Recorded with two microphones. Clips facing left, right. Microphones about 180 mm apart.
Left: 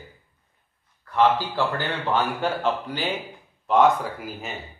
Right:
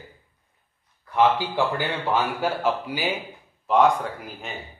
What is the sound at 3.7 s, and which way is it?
Speech, centre (ahead or behind).